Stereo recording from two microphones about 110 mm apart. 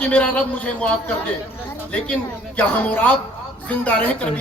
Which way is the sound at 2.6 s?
15° left (ahead or behind).